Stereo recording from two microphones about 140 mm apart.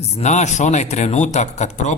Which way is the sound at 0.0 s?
55° left (ahead or behind).